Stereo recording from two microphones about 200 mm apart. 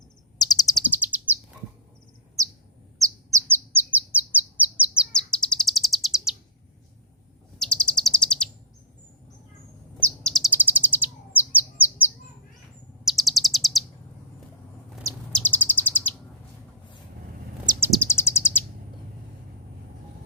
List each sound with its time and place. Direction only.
0.3 s bird: 20° left (ahead or behind)
0.9 s bird: 10° right (ahead or behind)
3.0 s bird: 15° right (ahead or behind)
5.1 s bird: 5° left (ahead or behind)
7.6 s bird: 5° left (ahead or behind)
10.0 s chirp: 5° left (ahead or behind)
10.5 s bird: 10° right (ahead or behind)
13.1 s chirp: centre (ahead or behind)
15.4 s bird: 10° left (ahead or behind)
17.7 s bird: 10° right (ahead or behind)
17.9 s bird: 10° left (ahead or behind)